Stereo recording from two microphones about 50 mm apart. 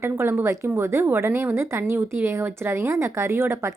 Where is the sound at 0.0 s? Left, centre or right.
Right.